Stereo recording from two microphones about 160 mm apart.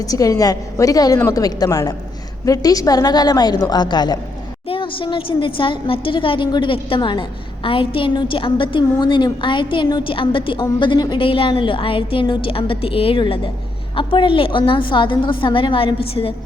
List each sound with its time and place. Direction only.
0.0 s a woman's voice: 20° left (ahead or behind)